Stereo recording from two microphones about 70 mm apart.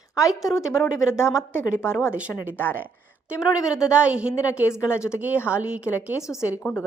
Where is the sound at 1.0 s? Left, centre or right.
Left.